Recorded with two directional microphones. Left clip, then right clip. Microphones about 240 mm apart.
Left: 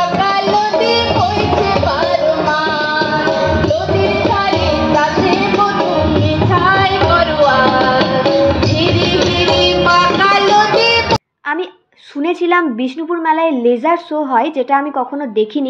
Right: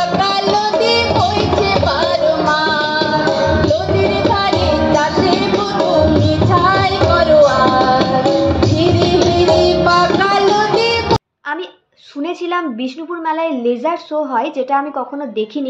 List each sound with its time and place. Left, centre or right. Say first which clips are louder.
0.1 s music: left 1 dB; centre
4.7 s music: left 1 dB; centre; by 11.1 s right
12.3 s a sound: left 6 dB; left
13.3 s a woman's voice: left 4 dB; left